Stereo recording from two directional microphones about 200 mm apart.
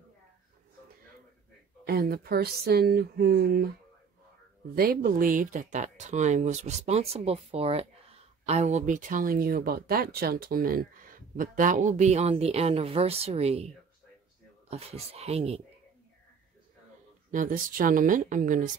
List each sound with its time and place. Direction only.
1.9 s speech: 50° right (ahead or behind)
4.7 s speech: 45° right (ahead or behind)
14.7 s speech: 30° right (ahead or behind)
17.3 s speech: 40° right (ahead or behind)